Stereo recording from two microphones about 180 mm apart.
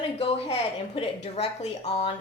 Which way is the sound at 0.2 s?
35° left (ahead or behind).